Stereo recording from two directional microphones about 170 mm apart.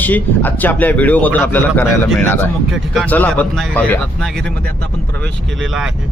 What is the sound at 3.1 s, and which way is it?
Speech, 10° left (ahead or behind).